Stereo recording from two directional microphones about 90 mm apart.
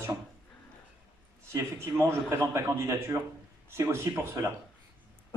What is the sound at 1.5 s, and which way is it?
A man's voice, 30° right (ahead or behind).